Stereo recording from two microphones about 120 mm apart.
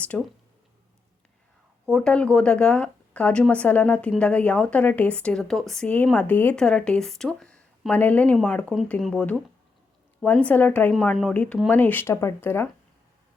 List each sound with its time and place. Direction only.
0.1 s speech: 10° left (ahead or behind)
1.9 s speech: 5° left (ahead or behind)
10.9 s speech: centre (ahead or behind); by 12.6 s 20° left (ahead or behind)